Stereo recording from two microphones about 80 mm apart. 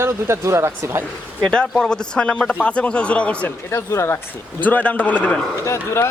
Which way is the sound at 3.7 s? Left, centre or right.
Left.